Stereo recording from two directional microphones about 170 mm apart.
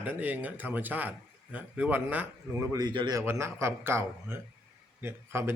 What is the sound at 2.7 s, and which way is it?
A man's voice, 25° right (ahead or behind).